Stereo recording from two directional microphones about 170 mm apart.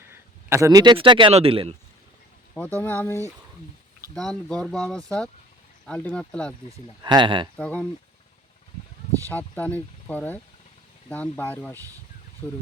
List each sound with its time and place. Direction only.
0.1 s speech: 15° right (ahead or behind); by 1.7 s 35° right (ahead or behind)
2.8 s speech: 10° left (ahead or behind)
6.7 s speech: 25° right (ahead or behind)
7.5 s speech: 10° left (ahead or behind)
9.3 s speech: 10° left (ahead or behind)